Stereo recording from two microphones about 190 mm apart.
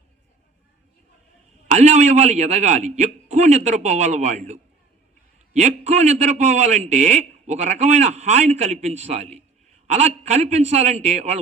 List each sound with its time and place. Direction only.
1.6 s a man's voice: 40° right (ahead or behind)